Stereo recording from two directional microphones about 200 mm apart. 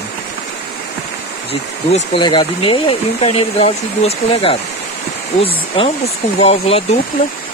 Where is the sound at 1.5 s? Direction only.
30° left (ahead or behind).